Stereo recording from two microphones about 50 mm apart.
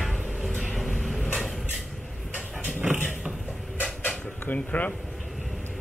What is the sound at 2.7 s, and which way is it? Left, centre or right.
Dog, right.